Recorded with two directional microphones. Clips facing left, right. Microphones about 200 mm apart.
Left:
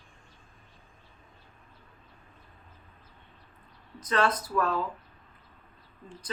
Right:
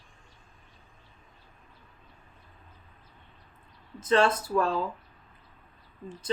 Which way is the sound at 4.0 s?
25° right (ahead or behind).